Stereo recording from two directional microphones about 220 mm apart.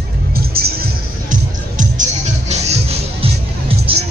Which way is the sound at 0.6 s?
45° right (ahead or behind).